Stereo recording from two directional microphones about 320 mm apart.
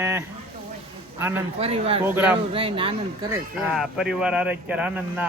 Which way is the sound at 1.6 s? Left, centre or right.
Centre.